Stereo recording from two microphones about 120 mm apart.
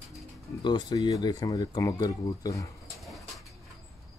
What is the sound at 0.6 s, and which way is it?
Speech, 35° left (ahead or behind).